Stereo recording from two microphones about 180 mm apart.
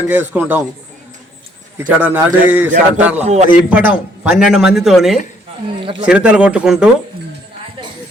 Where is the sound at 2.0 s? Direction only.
10° right (ahead or behind).